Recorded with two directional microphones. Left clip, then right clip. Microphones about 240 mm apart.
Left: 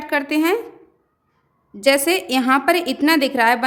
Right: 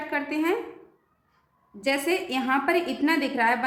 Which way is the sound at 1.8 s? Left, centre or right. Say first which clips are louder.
Left 9 dB; left.